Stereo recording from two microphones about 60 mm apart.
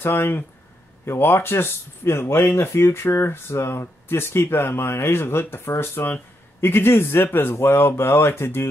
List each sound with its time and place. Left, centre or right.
0.0 s a man's voice: left